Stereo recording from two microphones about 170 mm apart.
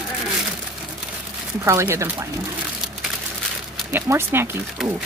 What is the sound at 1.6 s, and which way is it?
Speech, 15° right (ahead or behind).